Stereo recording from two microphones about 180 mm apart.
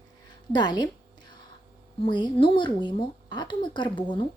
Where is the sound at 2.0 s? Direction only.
25° left (ahead or behind).